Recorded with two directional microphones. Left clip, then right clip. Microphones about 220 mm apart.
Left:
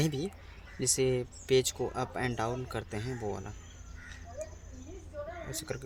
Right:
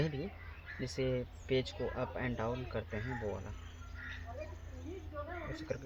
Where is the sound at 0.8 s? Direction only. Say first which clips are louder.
Left 7 dB; 60° left (ahead or behind).